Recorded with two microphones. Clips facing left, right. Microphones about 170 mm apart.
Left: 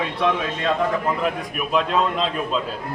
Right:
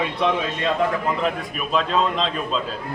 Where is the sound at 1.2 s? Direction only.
10° left (ahead or behind).